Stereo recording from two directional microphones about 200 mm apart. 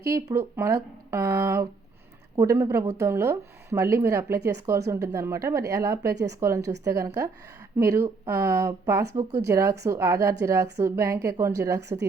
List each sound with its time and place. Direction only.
0.1 s speech: 15° right (ahead or behind)
11.8 s speech: 60° right (ahead or behind)